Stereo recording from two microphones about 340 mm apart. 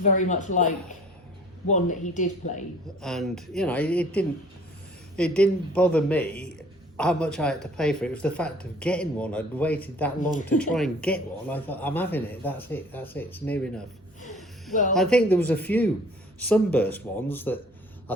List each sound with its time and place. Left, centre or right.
0.0 s speech: left
3.0 s speech: centre
14.9 s speech: centre